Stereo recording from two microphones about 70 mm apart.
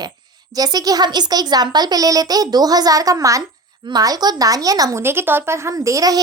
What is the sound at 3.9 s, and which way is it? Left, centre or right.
A child's voice, right.